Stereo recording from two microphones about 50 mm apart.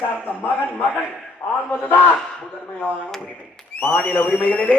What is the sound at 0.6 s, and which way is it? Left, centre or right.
A man's voice, left.